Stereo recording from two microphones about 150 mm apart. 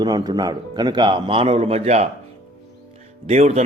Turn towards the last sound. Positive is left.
turn(degrees=-45)  # may be behind; listen again after turning